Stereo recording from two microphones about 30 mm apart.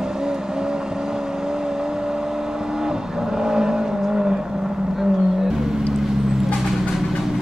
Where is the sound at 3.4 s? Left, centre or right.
Right.